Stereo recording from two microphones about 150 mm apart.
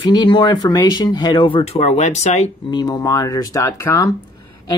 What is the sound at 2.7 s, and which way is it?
Speech, 25° left (ahead or behind).